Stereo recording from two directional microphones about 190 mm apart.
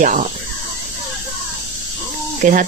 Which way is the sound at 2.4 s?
45° right (ahead or behind).